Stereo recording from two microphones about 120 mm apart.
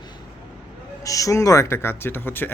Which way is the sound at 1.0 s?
30° left (ahead or behind).